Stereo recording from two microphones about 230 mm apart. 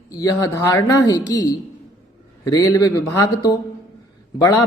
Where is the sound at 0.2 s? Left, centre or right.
Centre.